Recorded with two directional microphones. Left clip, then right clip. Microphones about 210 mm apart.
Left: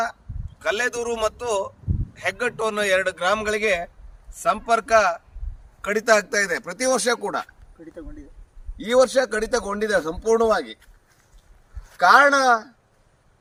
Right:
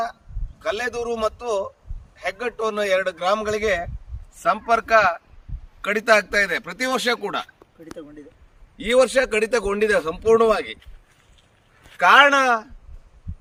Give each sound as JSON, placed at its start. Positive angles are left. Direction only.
{"t": 0.6, "sound": "a man's voice", "side_deg": 15}
{"t": 4.4, "sound": "a man's voice", "side_deg": 25}
{"t": 8.8, "sound": "speech", "side_deg": -35}
{"t": 11.9, "sound": "a man's voice", "side_deg": -25}